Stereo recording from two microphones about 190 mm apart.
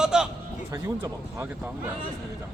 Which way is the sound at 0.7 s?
15° right (ahead or behind).